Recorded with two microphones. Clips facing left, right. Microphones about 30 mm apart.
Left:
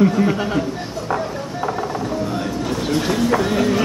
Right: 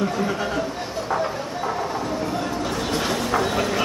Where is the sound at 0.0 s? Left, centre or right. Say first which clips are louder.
Left 7 dB; centre.